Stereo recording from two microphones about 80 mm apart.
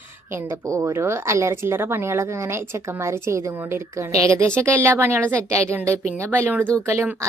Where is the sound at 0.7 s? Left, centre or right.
Right.